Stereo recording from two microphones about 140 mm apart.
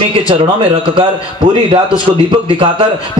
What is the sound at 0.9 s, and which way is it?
A man's voice, 40° right (ahead or behind).